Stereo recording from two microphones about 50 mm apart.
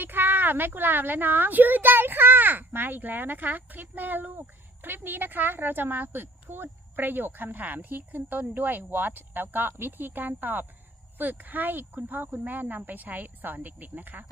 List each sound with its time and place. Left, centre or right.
0.0 s a woman's voice: right